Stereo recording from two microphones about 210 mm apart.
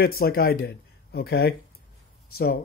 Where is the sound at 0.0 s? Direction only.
45° left (ahead or behind).